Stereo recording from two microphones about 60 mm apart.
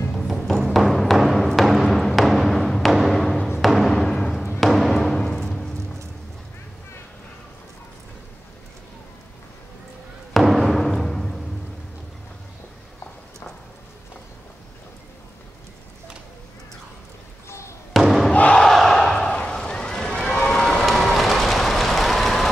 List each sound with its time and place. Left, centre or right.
0.1 s music: centre
3.5 s timpani: centre
4.6 s music: centre
10.3 s timpani: centre
17.5 s a sound: left
17.9 s crowd: centre
18.3 s crowd: left
18.6 s battle cry: centre
19.3 s run: centre
20.8 s a sound: centre